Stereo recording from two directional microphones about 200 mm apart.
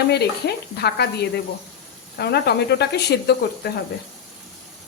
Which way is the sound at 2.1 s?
55° left (ahead or behind).